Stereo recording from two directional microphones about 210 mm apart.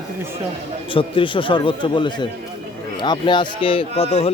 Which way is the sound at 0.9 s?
25° left (ahead or behind).